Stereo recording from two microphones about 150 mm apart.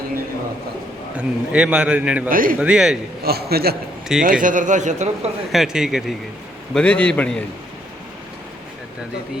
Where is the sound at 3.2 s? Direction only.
90° right.